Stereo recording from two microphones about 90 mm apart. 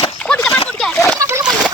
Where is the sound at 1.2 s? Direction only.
30° right (ahead or behind).